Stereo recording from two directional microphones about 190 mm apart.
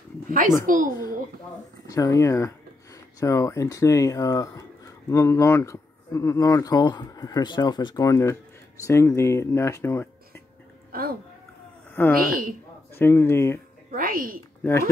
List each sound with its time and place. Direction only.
0.7 s a woman's voice: 45° right (ahead or behind)
1.9 s speech: 15° left (ahead or behind)
10.9 s a sound: 50° right (ahead or behind)
11.9 s a woman's voice: 10° left (ahead or behind)
12.2 s a woman's voice: 50° right (ahead or behind)
12.9 s speech: 10° left (ahead or behind)
13.8 s speech: 50° right (ahead or behind)
14.6 s speech: 15° left (ahead or behind)